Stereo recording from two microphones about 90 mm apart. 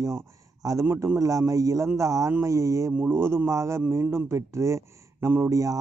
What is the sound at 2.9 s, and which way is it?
Speech, 20° right (ahead or behind).